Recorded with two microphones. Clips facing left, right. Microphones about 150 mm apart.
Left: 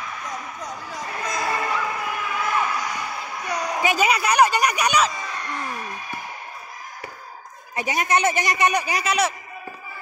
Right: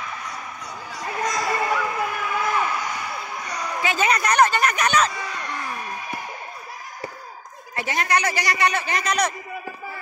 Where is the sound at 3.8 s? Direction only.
15° left (ahead or behind).